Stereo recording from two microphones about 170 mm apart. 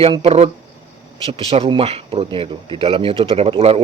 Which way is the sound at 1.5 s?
35° right (ahead or behind).